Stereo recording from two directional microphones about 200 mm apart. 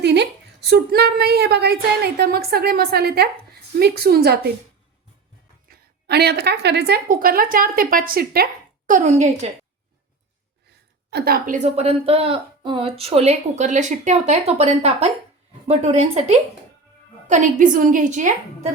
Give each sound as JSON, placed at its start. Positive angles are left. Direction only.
{"t": 0.0, "sound": "a woman's voice", "side_deg": -55}
{"t": 5.6, "sound": "a woman's voice", "side_deg": -50}
{"t": 8.9, "sound": "a woman's voice", "side_deg": -40}
{"t": 11.1, "sound": "a woman's voice", "side_deg": -45}